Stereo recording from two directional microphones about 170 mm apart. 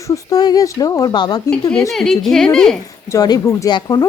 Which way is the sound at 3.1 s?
20° left (ahead or behind).